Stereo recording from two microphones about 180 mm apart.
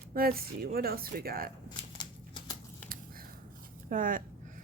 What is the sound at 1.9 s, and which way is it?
Shuffling cards, 25° left (ahead or behind).